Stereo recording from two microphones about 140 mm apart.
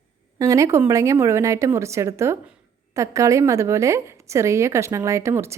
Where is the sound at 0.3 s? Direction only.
25° right (ahead or behind).